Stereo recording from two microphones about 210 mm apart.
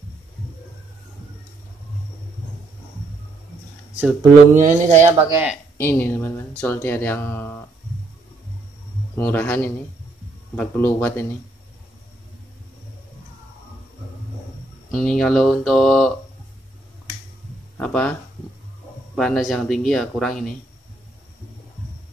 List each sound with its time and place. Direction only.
3.9 s speech: 10° right (ahead or behind)
4.6 s speech: 35° right (ahead or behind)
5.1 s speech: 15° right (ahead or behind)
5.8 s speech: 10° left (ahead or behind)
9.1 s speech: 10° left (ahead or behind)
14.9 s speech: centre (ahead or behind)
17.7 s speech: 5° left (ahead or behind)
19.1 s speech: centre (ahead or behind)